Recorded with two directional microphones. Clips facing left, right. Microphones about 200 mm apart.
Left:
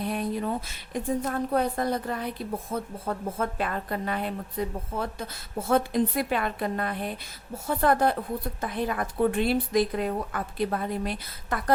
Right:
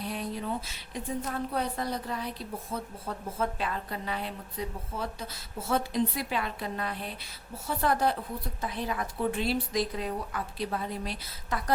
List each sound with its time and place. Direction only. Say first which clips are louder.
0.0 s a woman's voice: left 6 dB; 50° left (ahead or behind)